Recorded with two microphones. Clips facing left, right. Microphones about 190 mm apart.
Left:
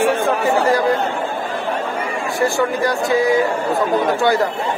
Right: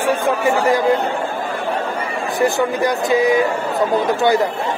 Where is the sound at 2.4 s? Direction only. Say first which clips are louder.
Right 1 dB; 20° right (ahead or behind).